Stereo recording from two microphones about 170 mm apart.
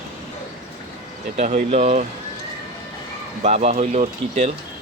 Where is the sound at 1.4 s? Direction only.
40° right (ahead or behind).